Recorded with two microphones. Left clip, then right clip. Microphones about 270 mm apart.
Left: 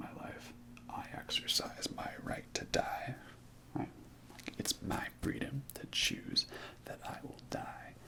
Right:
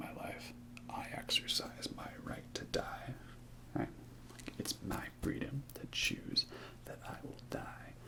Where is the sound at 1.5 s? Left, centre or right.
Left.